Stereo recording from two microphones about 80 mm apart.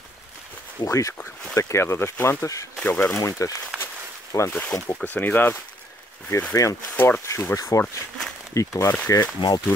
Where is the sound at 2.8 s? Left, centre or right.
Centre.